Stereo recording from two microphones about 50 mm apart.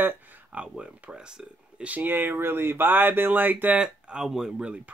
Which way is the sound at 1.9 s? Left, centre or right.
Right.